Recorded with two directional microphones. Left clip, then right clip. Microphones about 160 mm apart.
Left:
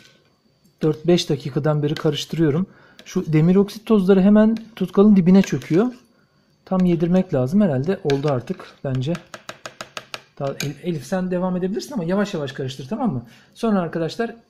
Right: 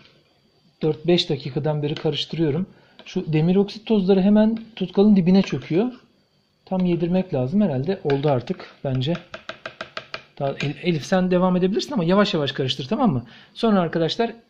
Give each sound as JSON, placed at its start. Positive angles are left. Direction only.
{"t": 0.7, "sound": "speech", "side_deg": 25}
{"t": 5.6, "sound": "speech", "side_deg": 25}
{"t": 8.1, "sound": "a sound", "side_deg": 10}
{"t": 10.4, "sound": "speech", "side_deg": 0}
{"t": 10.8, "sound": "speech", "side_deg": -15}
{"t": 13.6, "sound": "speech", "side_deg": -10}